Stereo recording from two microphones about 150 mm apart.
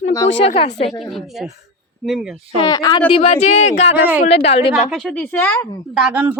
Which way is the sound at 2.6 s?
25° left (ahead or behind).